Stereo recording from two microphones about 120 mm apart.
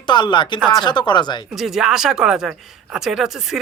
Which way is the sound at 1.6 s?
5° right (ahead or behind).